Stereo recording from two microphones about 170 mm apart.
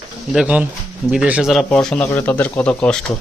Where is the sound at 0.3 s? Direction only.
10° right (ahead or behind).